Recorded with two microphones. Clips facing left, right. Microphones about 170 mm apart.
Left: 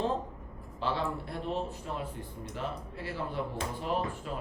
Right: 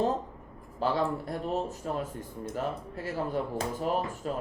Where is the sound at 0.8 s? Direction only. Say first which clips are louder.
Right 4 dB; 40° right (ahead or behind).